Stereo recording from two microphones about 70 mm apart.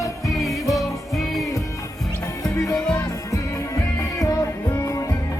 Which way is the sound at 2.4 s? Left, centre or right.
Left.